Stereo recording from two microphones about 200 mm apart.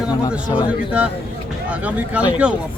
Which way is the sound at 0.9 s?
5° right (ahead or behind).